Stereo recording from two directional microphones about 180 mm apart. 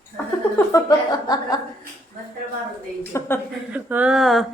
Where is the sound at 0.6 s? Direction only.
20° left (ahead or behind).